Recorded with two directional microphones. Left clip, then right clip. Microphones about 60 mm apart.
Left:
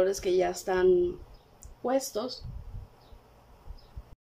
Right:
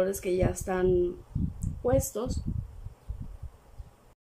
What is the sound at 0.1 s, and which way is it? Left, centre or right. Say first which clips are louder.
Speech: left 2 dB; centre.